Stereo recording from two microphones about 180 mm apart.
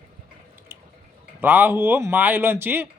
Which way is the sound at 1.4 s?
10° right (ahead or behind).